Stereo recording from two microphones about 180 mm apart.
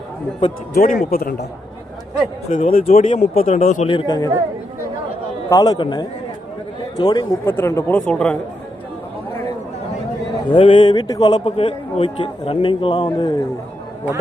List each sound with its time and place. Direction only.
0.7 s a man's voice: 50° left (ahead or behind)
2.5 s speech: 50° left (ahead or behind)
2.8 s speech: 35° left (ahead or behind)
3.8 s a man's voice: 25° left (ahead or behind)
5.5 s a man's voice: 20° left (ahead or behind); by 8.4 s 5° left (ahead or behind)
10.5 s a man's voice: 30° left (ahead or behind)